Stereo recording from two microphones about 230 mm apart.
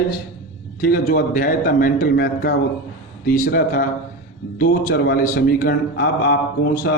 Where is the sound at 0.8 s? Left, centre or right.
Left.